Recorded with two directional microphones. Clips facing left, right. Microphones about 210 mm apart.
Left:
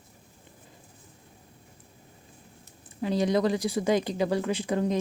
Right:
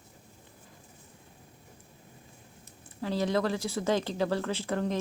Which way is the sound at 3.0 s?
15° left (ahead or behind).